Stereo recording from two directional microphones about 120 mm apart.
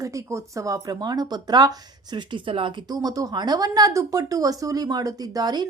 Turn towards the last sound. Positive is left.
turn(degrees=-35)  # may be behind; listen again after turning